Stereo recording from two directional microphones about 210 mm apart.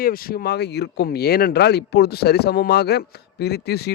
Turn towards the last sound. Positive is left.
turn(degrees=50)  # may be behind; listen again after turning